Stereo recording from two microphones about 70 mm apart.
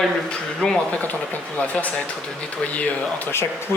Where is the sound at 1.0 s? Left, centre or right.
Left.